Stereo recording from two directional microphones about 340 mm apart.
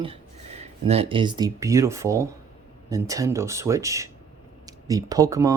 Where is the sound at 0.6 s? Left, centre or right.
Centre.